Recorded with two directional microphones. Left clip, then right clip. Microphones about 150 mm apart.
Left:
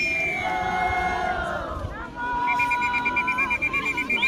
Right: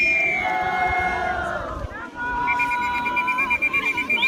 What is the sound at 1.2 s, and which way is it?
Crowd, 55° right (ahead or behind).